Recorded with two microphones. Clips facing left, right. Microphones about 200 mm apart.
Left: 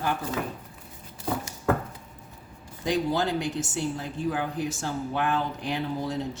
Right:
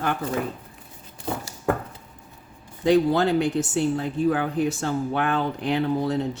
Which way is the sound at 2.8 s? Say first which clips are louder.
Right 7 dB; 60° right (ahead or behind).